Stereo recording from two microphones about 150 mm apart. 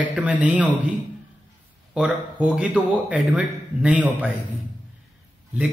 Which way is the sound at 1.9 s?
5° right (ahead or behind).